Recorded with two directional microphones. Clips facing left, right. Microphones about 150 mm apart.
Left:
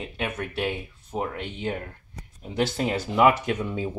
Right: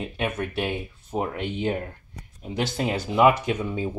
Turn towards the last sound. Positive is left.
turn(degrees=-5)  # may be behind; listen again after turning